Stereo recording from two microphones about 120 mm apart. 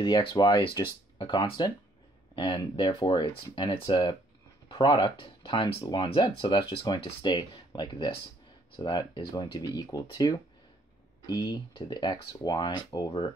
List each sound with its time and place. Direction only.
0.0 s speech: 40° left (ahead or behind)